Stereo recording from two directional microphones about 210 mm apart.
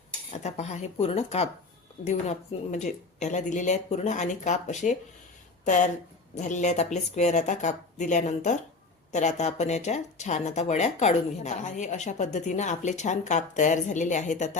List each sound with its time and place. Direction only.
0.3 s speech: 30° left (ahead or behind)